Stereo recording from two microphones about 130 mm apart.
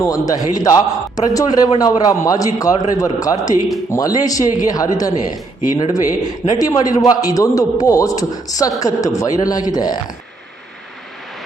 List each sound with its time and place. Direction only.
0.0 s a man's voice: 25° left (ahead or behind)